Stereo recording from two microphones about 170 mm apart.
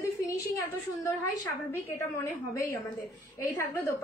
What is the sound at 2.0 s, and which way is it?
A woman's voice, 15° left (ahead or behind).